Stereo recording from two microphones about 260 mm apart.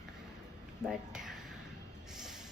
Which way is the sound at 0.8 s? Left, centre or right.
Centre.